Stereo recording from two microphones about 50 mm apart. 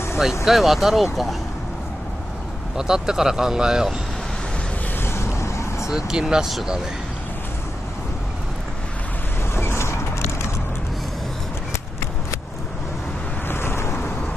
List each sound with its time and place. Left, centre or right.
0.5 s speech: centre
2.8 s speech: centre
5.0 s vehicle: left
5.9 s speech: centre
9.6 s vehicle: left
13.5 s waves: left